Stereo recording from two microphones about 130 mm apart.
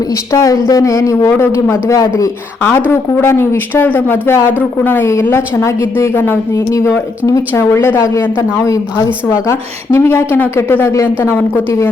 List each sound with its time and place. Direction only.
0.3 s a woman's voice: 25° left (ahead or behind)
2.6 s a woman's voice: 10° left (ahead or behind)